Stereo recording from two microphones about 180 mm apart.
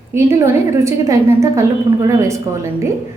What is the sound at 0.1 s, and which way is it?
A woman's voice, 15° right (ahead or behind).